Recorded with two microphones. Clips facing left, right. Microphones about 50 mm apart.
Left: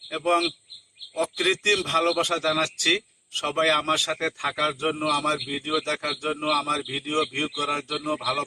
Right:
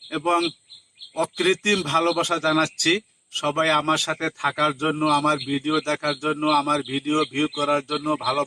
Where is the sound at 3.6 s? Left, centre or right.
Right.